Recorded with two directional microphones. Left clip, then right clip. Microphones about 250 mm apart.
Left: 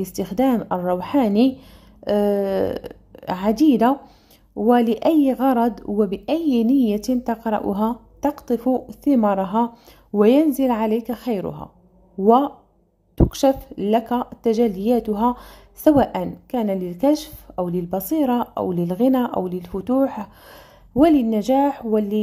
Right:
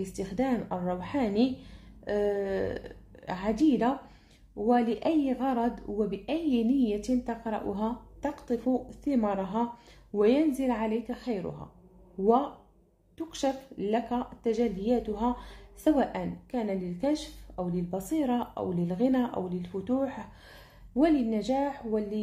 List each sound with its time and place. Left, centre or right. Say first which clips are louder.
0.0 s speech: left 10 dB; left
13.3 s speech: left 10 dB; left